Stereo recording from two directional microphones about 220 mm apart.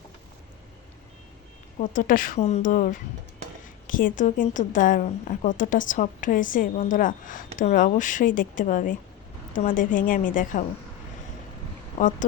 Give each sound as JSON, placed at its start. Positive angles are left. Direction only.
{"t": 1.8, "sound": "a woman's voice", "side_deg": 35}
{"t": 12.0, "sound": "speech", "side_deg": 35}